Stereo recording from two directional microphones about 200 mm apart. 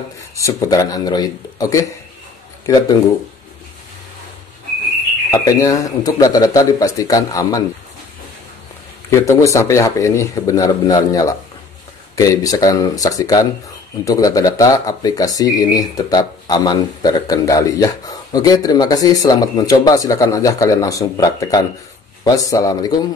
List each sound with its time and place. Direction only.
0.4 s speech: 15° left (ahead or behind)
5.3 s speech: 15° left (ahead or behind)
9.1 s speech: 15° left (ahead or behind)